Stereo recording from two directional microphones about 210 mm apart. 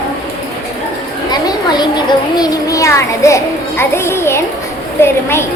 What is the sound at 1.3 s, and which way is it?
Speech, 20° left (ahead or behind).